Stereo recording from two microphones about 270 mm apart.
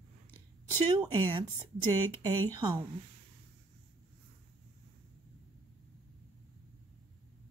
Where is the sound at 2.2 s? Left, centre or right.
Centre.